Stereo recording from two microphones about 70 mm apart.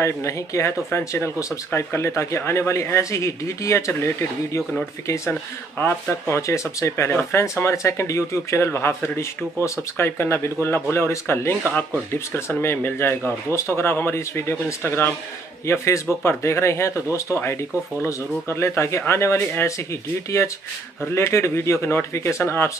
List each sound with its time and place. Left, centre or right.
0.0 s speech: left
5.8 s speech: left